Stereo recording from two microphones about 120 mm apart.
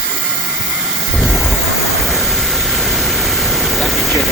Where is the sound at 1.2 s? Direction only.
Centre (ahead or behind).